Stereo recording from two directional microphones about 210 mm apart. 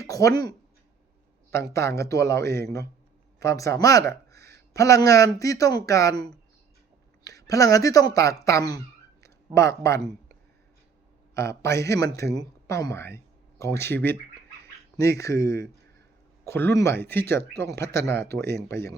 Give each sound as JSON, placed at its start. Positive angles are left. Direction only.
{"t": 0.0, "sound": "a sound", "side_deg": 15}
{"t": 1.5, "sound": "speech", "side_deg": 15}
{"t": 3.4, "sound": "speech", "side_deg": 15}
{"t": 7.3, "sound": "speech", "side_deg": 15}
{"t": 11.3, "sound": "speech", "side_deg": 15}
{"t": 15.2, "sound": "speech", "side_deg": 15}